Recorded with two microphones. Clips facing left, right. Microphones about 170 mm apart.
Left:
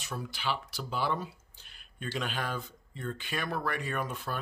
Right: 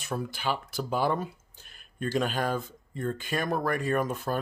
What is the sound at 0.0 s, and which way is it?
Speech, 50° right (ahead or behind).